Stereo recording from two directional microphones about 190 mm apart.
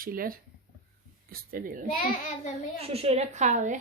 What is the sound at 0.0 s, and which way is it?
Speech, 50° right (ahead or behind).